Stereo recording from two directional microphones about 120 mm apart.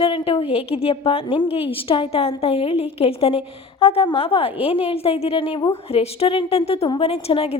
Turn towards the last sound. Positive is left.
turn(degrees=55)  # may be behind; listen again after turning